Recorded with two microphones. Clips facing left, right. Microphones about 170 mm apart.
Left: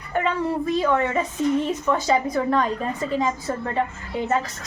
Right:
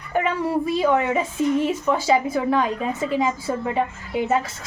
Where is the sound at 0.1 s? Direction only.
10° right (ahead or behind).